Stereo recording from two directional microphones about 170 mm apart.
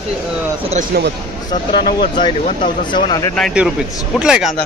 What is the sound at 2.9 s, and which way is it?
Speech, 25° left (ahead or behind).